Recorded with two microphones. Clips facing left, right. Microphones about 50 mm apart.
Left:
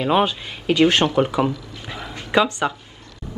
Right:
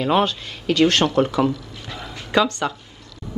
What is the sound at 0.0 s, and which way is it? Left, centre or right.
Speech, centre.